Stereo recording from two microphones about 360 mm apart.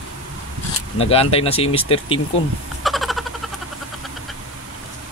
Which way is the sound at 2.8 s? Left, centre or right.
Centre.